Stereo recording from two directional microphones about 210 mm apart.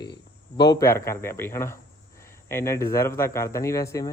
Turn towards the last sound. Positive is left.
turn(degrees=15)  # may be behind; listen again after turning